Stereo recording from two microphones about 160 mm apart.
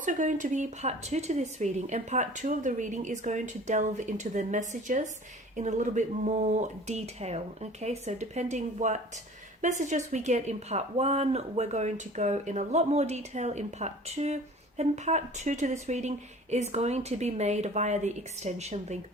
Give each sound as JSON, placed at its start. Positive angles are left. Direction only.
{"t": 0.0, "sound": "speech", "side_deg": -50}